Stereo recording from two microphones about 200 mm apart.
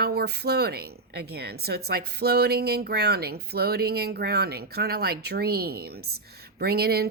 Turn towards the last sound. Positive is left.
turn(degrees=-50)  # may be behind; listen again after turning